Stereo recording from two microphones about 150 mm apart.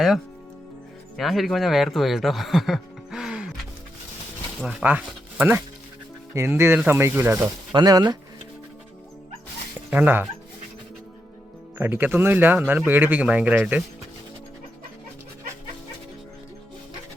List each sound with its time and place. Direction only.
1.1 s speech: centre (ahead or behind)
7.7 s speech: 25° right (ahead or behind)
9.9 s speech: 10° right (ahead or behind)
11.8 s speech: 10° right (ahead or behind)